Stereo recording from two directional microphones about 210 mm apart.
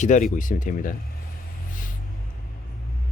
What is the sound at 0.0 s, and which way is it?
Speech, 35° left (ahead or behind).